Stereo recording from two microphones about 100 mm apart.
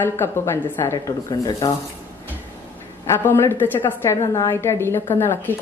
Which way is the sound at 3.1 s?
25° left (ahead or behind).